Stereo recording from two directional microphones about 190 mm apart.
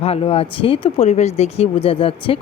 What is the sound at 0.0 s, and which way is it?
A woman's voice, 30° left (ahead or behind).